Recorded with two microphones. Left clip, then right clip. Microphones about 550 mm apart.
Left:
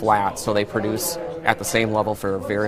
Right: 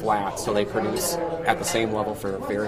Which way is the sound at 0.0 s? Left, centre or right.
Left.